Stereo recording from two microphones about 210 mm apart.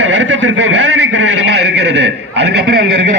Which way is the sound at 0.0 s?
60° right (ahead or behind).